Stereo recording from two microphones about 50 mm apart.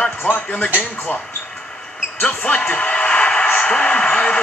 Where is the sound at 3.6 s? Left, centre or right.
Centre.